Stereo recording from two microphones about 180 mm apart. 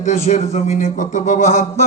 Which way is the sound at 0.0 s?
40° left (ahead or behind).